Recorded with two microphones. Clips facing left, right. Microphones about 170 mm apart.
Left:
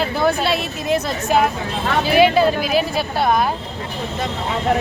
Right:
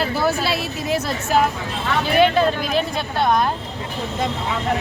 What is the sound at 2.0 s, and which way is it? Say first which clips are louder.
Speech: left 2 dB; 5° left (ahead or behind).